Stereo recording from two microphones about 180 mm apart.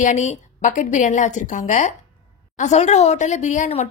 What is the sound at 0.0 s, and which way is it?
A woman's voice, 40° left (ahead or behind).